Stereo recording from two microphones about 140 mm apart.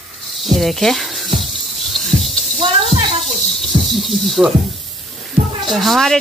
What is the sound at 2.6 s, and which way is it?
Snake, 45° right (ahead or behind).